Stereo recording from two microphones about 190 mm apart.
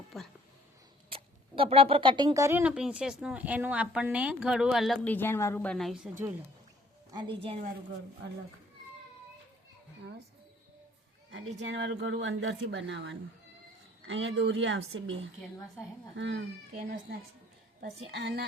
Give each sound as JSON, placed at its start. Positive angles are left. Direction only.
{"t": 0.1, "sound": "speech", "side_deg": 0}
{"t": 1.1, "sound": "speech", "side_deg": -30}
{"t": 7.1, "sound": "a woman's voice", "side_deg": -25}
{"t": 11.3, "sound": "a woman's voice", "side_deg": -70}
{"t": 17.7, "sound": "a woman's voice", "side_deg": -60}